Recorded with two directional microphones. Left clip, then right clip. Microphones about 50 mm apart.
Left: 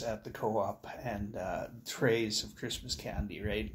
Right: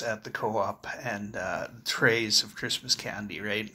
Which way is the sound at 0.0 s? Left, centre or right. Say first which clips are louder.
Right 5 dB; left.